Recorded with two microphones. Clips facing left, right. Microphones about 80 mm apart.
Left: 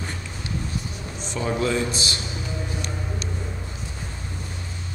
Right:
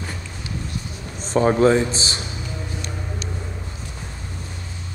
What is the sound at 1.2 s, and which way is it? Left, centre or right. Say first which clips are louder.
Speech: right 9 dB; right.